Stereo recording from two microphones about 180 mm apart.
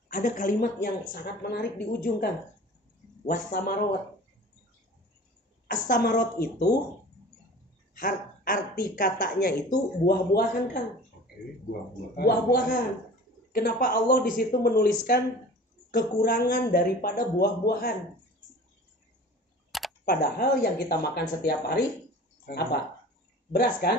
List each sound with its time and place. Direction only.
0.1 s speech: 45° left (ahead or behind)
3.3 s speech: 55° left (ahead or behind)
5.7 s speech: 55° left (ahead or behind)
7.9 s speech: 50° left (ahead or behind)
12.2 s speech: 60° left (ahead or behind)
19.7 s camera: centre (ahead or behind)
20.1 s speech: 60° left (ahead or behind)